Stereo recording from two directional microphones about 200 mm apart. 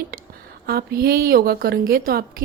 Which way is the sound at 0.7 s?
50° right (ahead or behind).